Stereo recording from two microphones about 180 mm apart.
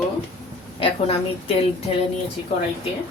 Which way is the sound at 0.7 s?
30° left (ahead or behind).